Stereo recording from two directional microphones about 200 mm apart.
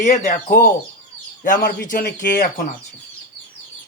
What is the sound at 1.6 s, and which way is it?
Speech, 45° left (ahead or behind).